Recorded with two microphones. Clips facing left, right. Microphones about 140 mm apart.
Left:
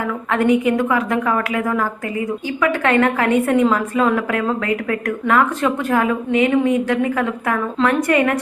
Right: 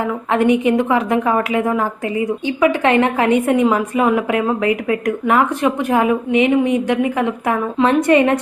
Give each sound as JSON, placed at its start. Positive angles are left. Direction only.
{"t": 0.3, "sound": "a woman's voice", "side_deg": -20}